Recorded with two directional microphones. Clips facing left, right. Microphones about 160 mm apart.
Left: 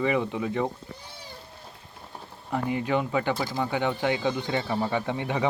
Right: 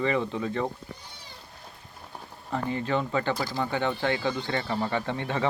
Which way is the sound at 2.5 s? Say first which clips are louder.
Left 2 dB; 15° left (ahead or behind).